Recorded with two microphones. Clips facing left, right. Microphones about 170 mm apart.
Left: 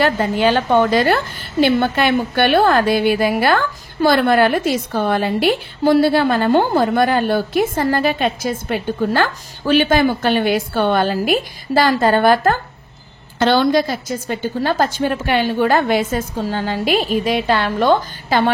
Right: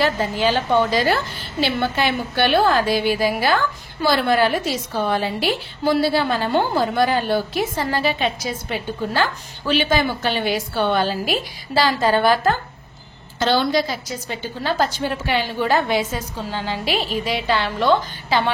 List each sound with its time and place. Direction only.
0.0 s a woman's voice: 60° left (ahead or behind)